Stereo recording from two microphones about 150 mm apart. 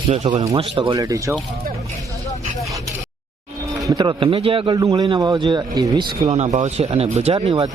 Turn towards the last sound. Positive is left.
turn(degrees=-35)  # may be behind; listen again after turning